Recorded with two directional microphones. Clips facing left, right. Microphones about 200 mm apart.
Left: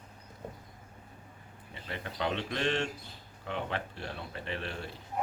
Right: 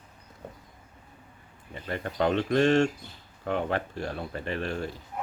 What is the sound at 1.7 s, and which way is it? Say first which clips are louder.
Speech: right 7 dB; 45° right (ahead or behind).